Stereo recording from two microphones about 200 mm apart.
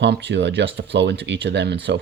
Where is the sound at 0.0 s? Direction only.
60° right (ahead or behind).